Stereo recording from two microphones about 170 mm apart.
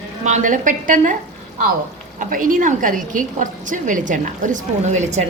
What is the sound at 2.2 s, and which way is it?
A woman's voice, 50° right (ahead or behind).